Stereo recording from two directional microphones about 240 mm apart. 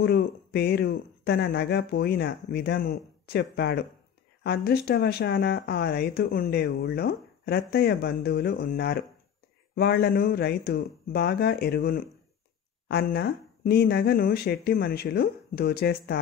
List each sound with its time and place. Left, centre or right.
0.0 s speech: left